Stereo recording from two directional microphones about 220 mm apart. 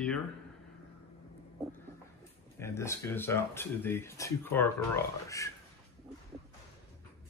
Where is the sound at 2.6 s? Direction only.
10° left (ahead or behind).